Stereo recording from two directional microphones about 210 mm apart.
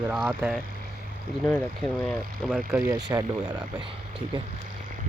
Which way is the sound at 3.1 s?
15° right (ahead or behind).